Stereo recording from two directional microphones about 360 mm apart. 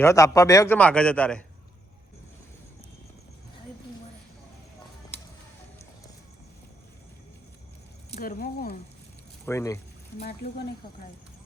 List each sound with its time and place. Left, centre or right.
0.0 s a man's voice: centre
8.1 s speech: left
9.5 s speech: centre